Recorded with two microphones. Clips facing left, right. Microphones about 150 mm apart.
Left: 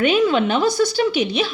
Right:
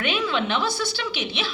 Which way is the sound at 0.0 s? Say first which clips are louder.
Left 9 dB; 45° left (ahead or behind).